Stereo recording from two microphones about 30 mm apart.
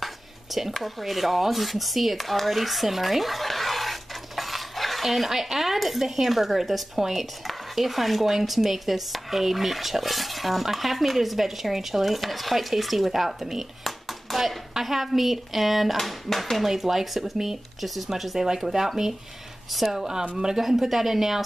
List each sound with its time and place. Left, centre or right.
0.0 s a sound: centre
0.8 s speech: centre
13.8 s a sound: centre
14.7 s speech: centre
16.6 s speech: centre
20.3 s speech: right
20.6 s speech: centre